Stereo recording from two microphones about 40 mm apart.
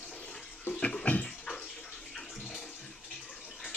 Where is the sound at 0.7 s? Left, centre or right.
Left.